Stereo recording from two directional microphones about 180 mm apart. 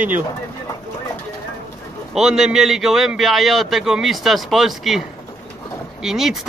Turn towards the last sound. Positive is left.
turn(degrees=0)  # may be behind; listen again after turning